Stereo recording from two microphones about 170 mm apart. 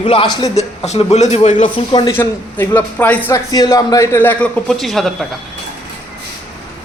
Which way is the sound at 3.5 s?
20° left (ahead or behind).